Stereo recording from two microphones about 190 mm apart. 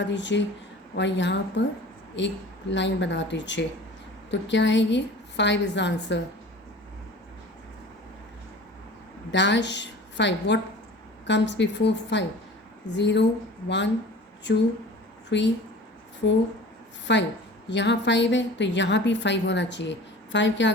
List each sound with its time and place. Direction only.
0.0 s a woman's voice: 70° left (ahead or behind)
9.3 s a woman's voice: 70° left (ahead or behind)